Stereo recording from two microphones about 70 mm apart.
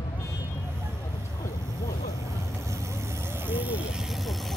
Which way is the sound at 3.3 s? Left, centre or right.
Right.